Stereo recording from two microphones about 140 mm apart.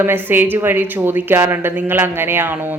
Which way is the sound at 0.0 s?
15° right (ahead or behind).